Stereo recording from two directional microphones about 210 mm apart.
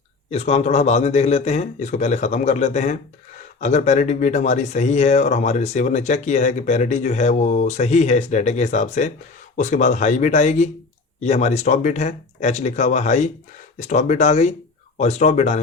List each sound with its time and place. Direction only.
0.3 s speech: 30° left (ahead or behind)